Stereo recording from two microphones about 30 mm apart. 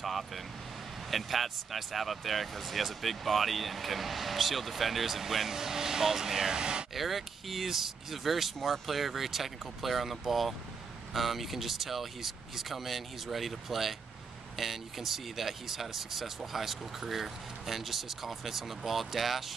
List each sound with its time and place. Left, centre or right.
1.1 s speech: centre
6.6 s speech: right
6.9 s speech: centre